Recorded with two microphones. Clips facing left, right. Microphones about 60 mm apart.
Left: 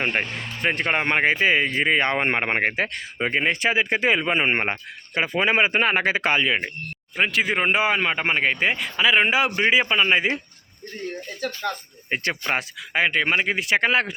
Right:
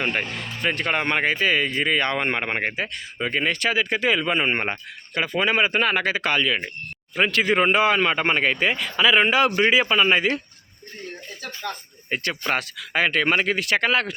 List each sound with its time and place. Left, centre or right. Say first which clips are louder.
0.0 s speech: left 1 dB; left
7.2 s speech: right 2 dB; centre
12.1 s speech: even; left
12.5 s speech: even; centre; by 14.1 s left